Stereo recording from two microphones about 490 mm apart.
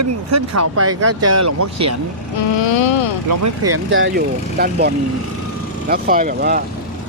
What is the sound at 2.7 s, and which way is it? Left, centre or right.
Speech, left.